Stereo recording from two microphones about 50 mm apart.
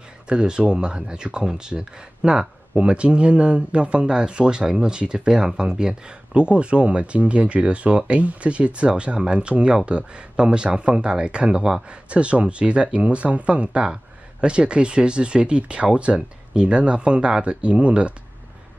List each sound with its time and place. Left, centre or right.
0.3 s speech: centre